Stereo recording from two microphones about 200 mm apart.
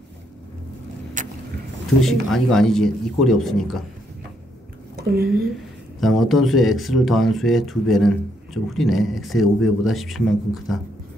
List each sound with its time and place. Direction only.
1.2 s vehicle: 40° right (ahead or behind)
2.0 s speech: centre (ahead or behind)
4.9 s speech: 50° right (ahead or behind)
5.9 s speech: centre (ahead or behind)